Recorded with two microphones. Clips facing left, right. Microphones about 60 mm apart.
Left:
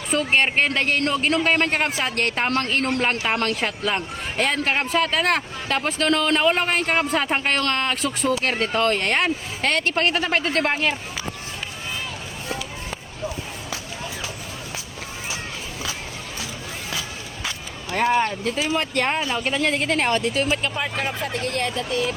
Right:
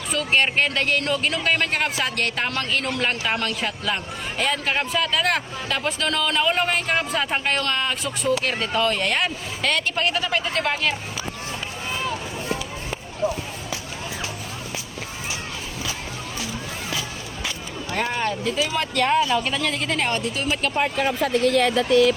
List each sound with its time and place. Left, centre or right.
0.1 s a man's voice: left
3.3 s a man's voice: left
7.6 s speech: left
8.5 s a man's voice: left
10.7 s speech: left
13.2 s speech: centre
17.9 s speech: left
20.1 s speech: left
21.2 s speech: right